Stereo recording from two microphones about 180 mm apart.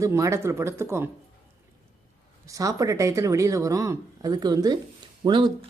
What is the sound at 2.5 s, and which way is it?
Speech, 20° right (ahead or behind).